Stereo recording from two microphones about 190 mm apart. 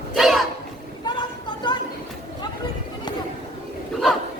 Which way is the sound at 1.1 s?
25° left (ahead or behind).